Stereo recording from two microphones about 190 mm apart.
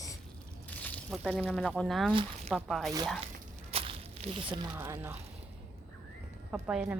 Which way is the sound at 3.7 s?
30° right (ahead or behind).